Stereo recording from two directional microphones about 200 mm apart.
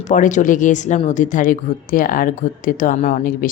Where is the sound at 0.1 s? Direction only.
40° left (ahead or behind).